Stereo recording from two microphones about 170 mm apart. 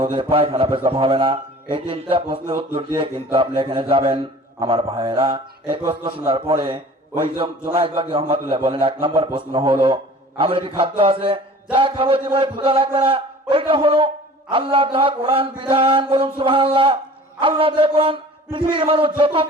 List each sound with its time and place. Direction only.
0.0 s a man's voice: 30° right (ahead or behind)